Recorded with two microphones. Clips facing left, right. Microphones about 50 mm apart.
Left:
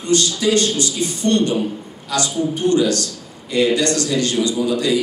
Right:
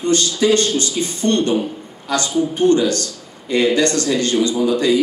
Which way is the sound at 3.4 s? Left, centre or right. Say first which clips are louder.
Right 1 dB; right.